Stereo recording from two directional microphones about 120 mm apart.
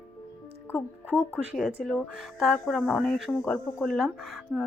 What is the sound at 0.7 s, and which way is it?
Speech, 15° left (ahead or behind).